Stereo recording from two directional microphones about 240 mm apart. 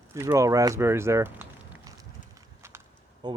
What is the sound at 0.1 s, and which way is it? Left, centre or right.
Speech, centre.